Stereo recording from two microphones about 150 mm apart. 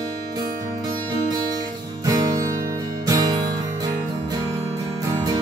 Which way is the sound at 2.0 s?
25° right (ahead or behind).